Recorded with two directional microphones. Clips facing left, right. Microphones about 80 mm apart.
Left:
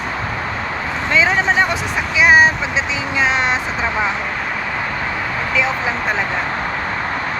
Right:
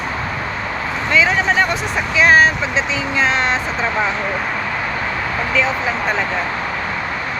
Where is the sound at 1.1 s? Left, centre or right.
Left.